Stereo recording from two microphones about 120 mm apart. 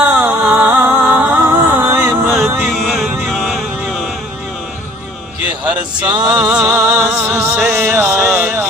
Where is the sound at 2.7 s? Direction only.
Centre (ahead or behind).